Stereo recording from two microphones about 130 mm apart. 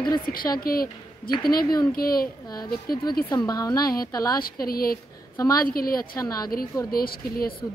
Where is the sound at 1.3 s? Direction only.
30° left (ahead or behind).